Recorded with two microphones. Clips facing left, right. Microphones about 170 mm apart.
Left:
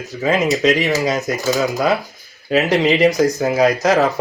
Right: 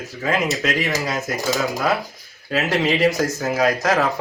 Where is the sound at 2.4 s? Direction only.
20° left (ahead or behind).